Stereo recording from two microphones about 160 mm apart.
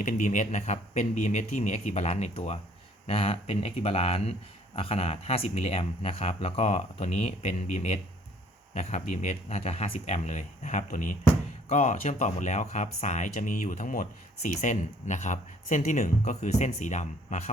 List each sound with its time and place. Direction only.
0.0 s speech: 55° left (ahead or behind)